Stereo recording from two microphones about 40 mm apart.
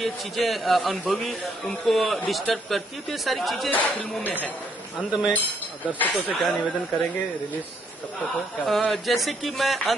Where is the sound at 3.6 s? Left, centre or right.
Left.